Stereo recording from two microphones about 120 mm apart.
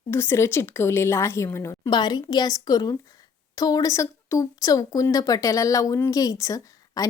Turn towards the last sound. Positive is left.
turn(degrees=30)  # may be behind; listen again after turning